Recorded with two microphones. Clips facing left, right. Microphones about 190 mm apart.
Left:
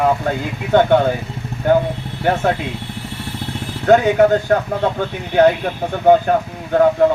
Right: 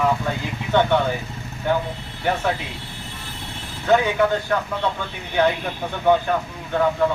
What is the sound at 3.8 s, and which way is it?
Speech, 45° left (ahead or behind).